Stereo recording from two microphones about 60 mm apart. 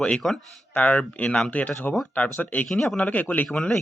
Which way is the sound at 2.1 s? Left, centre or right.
Left.